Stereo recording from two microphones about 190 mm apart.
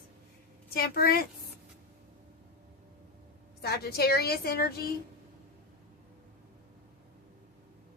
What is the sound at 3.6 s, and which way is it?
A woman's voice, 55° left (ahead or behind).